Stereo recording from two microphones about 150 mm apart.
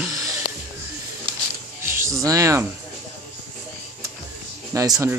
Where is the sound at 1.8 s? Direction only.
20° right (ahead or behind).